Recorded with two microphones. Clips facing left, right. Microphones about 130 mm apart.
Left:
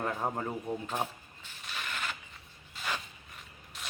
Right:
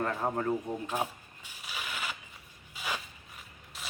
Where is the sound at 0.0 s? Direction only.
10° left (ahead or behind).